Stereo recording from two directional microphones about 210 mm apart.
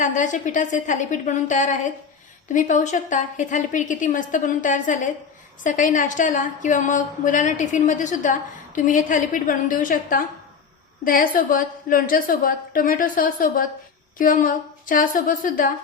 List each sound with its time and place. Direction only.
0.0 s a woman's voice: 35° left (ahead or behind)